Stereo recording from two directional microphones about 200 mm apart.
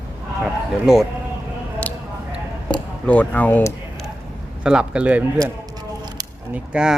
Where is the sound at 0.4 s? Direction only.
Centre (ahead or behind).